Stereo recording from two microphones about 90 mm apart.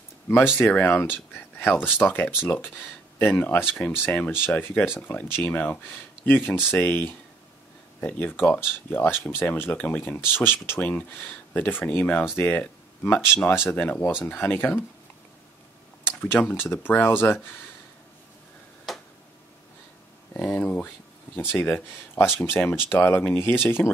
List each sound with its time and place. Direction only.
0.6 s speech: 20° left (ahead or behind)
16.2 s speech: 20° left (ahead or behind)
20.3 s speech: 15° left (ahead or behind)